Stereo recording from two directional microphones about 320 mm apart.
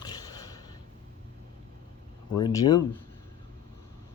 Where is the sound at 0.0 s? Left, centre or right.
Centre.